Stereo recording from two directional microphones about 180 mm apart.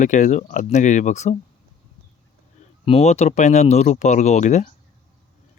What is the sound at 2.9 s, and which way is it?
Speech, 35° left (ahead or behind).